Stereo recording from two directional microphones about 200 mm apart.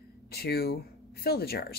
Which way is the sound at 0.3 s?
50° left (ahead or behind).